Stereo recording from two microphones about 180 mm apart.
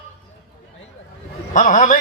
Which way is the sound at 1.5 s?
45° left (ahead or behind).